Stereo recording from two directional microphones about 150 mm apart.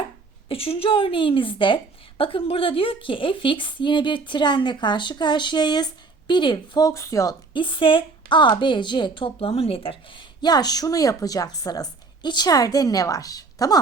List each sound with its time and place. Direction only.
0.4 s a woman's voice: 40° left (ahead or behind); by 7.3 s 20° left (ahead or behind)
7.5 s a woman's voice: 35° left (ahead or behind)